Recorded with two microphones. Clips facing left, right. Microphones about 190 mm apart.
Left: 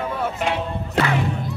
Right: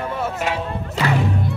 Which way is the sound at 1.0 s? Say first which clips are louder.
Left 1 dB; 65° left (ahead or behind).